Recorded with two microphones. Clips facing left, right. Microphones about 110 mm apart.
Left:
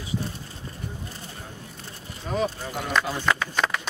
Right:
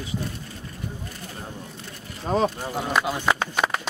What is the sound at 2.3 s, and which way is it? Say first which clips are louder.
Speech: right 4 dB; 35° right (ahead or behind).